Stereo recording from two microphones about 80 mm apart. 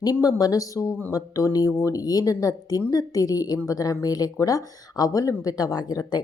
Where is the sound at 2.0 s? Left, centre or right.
Left.